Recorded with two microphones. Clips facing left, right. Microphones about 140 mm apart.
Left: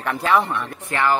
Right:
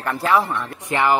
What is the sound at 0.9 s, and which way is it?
Speech, 15° right (ahead or behind).